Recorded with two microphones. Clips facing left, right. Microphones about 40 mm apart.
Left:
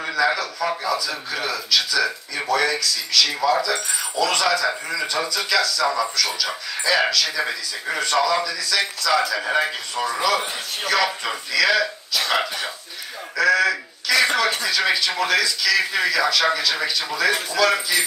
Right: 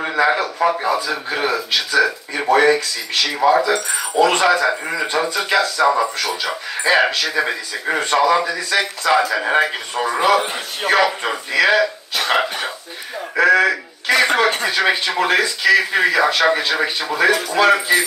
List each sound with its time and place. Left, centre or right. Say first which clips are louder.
0.0 s a sound: right 4 dB; right
0.8 s speech: right 5 dB; right
12.1 s throat clearing: right 3 dB; right
13.4 s speech: right 4 dB; right